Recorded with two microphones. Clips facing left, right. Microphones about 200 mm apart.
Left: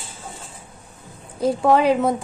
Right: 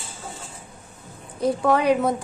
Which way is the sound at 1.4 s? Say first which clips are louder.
Left 3 dB; 25° left (ahead or behind).